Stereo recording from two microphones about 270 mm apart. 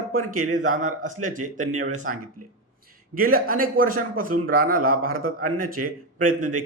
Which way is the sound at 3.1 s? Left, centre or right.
Right.